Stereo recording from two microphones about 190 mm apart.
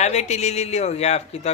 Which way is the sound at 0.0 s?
35° left (ahead or behind).